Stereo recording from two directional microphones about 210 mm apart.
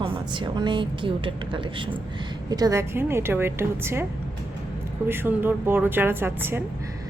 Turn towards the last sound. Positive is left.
turn(degrees=-10)  # may be behind; listen again after turning